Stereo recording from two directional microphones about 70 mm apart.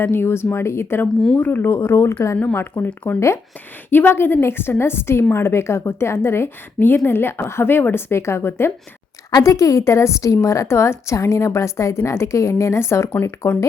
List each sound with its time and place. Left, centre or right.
0.0 s a woman's voice: left
2.8 s speech: left
3.2 s a woman's voice: left
3.8 s a woman's voice: left
9.3 s a woman's voice: left
13.1 s speech: left